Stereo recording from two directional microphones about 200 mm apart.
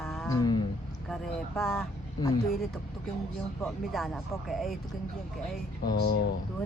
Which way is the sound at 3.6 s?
Centre (ahead or behind).